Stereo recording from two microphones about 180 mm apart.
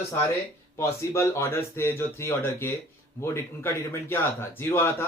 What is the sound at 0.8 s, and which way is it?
Speech, 15° left (ahead or behind).